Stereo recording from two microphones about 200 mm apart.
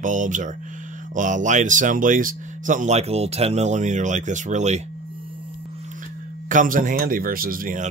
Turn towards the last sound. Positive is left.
turn(degrees=-40)  # may be behind; listen again after turning